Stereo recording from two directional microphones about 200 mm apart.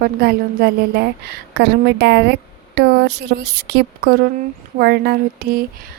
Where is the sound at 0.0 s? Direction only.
50° right (ahead or behind).